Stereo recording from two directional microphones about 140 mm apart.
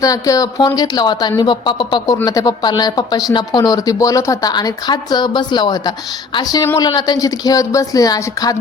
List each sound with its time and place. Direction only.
0.0 s speech: 25° left (ahead or behind)